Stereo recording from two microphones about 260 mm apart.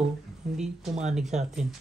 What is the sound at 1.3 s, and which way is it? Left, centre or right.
Speech, right.